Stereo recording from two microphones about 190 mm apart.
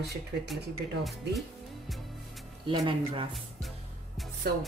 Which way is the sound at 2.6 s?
30° right (ahead or behind).